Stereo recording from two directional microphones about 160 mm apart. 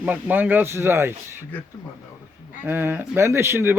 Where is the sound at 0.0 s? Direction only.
10° right (ahead or behind).